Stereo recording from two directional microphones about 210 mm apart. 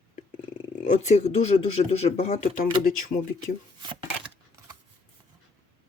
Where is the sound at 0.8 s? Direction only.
35° left (ahead or behind).